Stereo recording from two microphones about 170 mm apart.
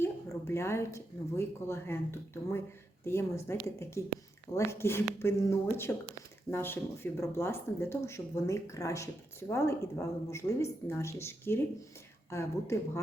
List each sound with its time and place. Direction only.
0.0 s speech: 15° left (ahead or behind)